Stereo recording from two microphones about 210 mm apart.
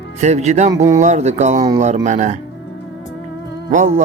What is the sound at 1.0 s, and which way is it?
Speech, 35° right (ahead or behind).